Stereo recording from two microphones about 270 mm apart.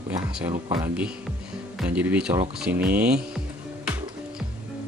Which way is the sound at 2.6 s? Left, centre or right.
Centre.